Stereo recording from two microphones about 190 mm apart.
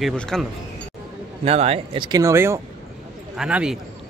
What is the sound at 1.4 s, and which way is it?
A man's voice, 30° right (ahead or behind).